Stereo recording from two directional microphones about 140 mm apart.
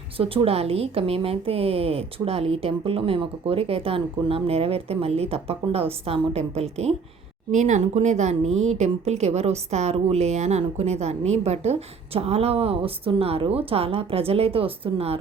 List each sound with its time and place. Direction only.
0.2 s speech: 40° right (ahead or behind)
7.5 s speech: 60° right (ahead or behind); by 15.2 s 45° right (ahead or behind)